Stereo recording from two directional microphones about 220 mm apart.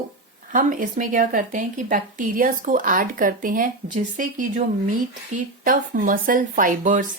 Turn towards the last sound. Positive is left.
turn(degrees=-35)  # may be behind; listen again after turning